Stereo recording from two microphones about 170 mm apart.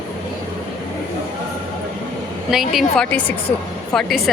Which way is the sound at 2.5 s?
Centre (ahead or behind).